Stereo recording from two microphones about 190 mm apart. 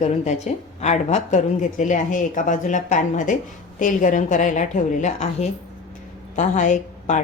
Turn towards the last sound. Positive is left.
turn(degrees=40)  # may be behind; listen again after turning